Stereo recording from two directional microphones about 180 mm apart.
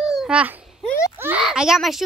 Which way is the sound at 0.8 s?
15° left (ahead or behind).